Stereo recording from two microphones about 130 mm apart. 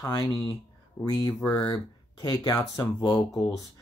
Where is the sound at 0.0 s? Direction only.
30° left (ahead or behind).